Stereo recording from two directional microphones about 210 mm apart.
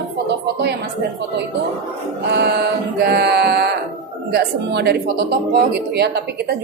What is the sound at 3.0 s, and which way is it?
Speech, 50° right (ahead or behind).